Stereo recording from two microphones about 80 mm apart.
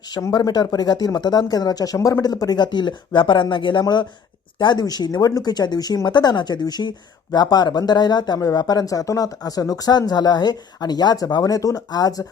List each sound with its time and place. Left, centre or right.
0.2 s speech: left
2.6 s speech: left
8.4 s speech: left